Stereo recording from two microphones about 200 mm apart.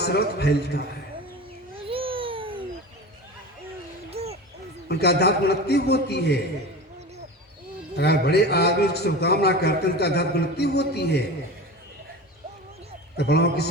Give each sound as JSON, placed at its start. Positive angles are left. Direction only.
{"t": 0.0, "sound": "a man's voice", "side_deg": 55}
{"t": 1.8, "sound": "babbling", "side_deg": -25}
{"t": 4.1, "sound": "a sound", "side_deg": -30}
{"t": 4.9, "sound": "a man's voice", "side_deg": 55}
{"t": 7.9, "sound": "a man's voice", "side_deg": 55}
{"t": 13.1, "sound": "a man's voice", "side_deg": 55}